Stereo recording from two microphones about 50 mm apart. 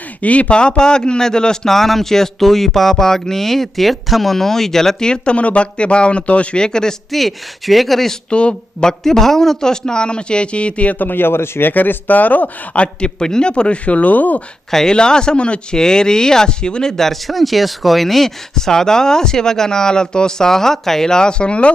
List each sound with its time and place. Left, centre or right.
0.2 s a man's voice: left
7.1 s speech: centre
8.3 s a man's voice: left
11.7 s a man's voice: left
14.7 s a man's voice: centre